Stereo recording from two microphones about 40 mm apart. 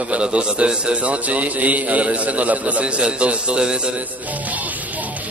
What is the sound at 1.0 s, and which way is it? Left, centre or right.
A man's voice, right.